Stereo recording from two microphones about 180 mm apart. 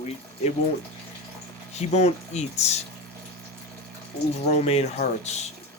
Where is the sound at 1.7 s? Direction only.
35° left (ahead or behind).